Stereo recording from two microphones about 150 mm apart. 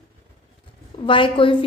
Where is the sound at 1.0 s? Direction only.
35° left (ahead or behind).